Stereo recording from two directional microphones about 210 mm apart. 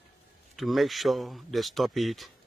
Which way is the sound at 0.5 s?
Centre (ahead or behind).